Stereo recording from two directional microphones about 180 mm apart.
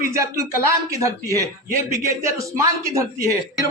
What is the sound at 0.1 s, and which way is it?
A man's voice, 15° right (ahead or behind).